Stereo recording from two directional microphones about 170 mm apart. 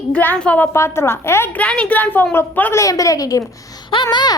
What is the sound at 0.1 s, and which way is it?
A woman's voice, 10° left (ahead or behind).